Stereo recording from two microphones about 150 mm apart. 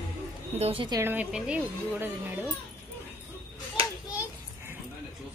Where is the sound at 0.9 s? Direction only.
20° right (ahead or behind).